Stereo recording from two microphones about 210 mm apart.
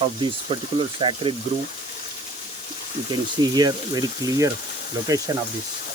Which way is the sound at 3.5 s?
15° right (ahead or behind).